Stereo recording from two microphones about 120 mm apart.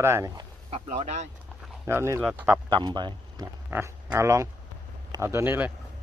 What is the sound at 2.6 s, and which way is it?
Speech, 40° right (ahead or behind).